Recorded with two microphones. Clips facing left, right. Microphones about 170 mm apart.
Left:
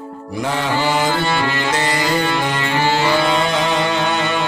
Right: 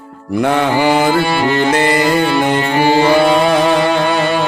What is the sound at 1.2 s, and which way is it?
Music, 10° right (ahead or behind).